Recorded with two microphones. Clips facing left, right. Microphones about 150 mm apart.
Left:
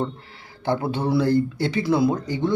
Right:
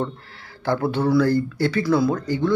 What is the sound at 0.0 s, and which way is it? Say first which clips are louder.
A woman's voice: even; 20° left (ahead or behind).